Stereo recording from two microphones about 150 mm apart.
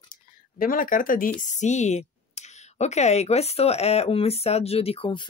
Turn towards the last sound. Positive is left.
turn(degrees=35)  # may be behind; listen again after turning